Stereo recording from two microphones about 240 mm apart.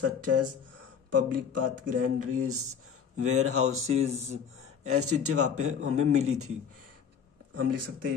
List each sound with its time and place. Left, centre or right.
0.0 s speech: right
4.6 s a sound: right
5.2 s speech: right
7.5 s speech: right